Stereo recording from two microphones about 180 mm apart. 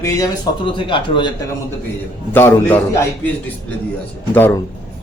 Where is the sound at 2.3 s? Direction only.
10° left (ahead or behind).